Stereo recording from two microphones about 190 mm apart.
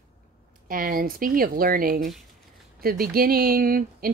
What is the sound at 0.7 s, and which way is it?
Speech, 50° right (ahead or behind).